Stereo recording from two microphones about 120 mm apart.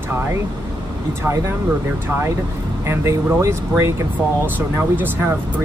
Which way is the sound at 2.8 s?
25° right (ahead or behind).